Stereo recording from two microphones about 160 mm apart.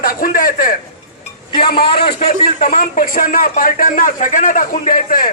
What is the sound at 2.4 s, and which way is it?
A man's voice, 60° left (ahead or behind).